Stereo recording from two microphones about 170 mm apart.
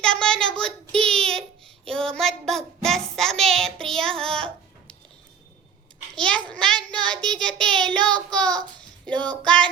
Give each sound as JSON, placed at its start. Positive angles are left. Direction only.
{"t": 0.0, "sound": "child singing", "side_deg": 5}
{"t": 6.1, "sound": "child singing", "side_deg": 5}
{"t": 9.0, "sound": "a sound", "side_deg": 5}